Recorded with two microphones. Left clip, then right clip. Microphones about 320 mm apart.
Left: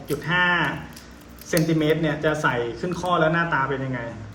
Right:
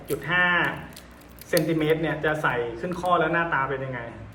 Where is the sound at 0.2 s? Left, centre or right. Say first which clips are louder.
Left 1 dB; centre.